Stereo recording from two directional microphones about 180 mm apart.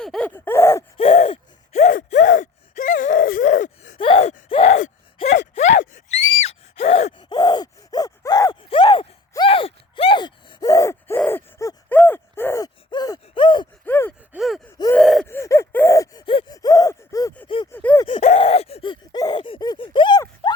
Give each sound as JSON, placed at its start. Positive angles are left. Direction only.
{"t": 0.0, "sound": "gasp", "side_deg": 5}
{"t": 0.9, "sound": "gasp", "side_deg": 35}
{"t": 3.9, "sound": "gasp", "side_deg": 30}
{"t": 5.5, "sound": "a sound", "side_deg": 40}
{"t": 5.9, "sound": "gasp", "side_deg": 35}
{"t": 13.8, "sound": "gasp", "side_deg": 10}
{"t": 14.3, "sound": "gasp", "side_deg": 0}
{"t": 15.4, "sound": "a sound", "side_deg": 15}
{"t": 16.6, "sound": "gasp", "side_deg": 20}
{"t": 18.3, "sound": "a sound", "side_deg": 35}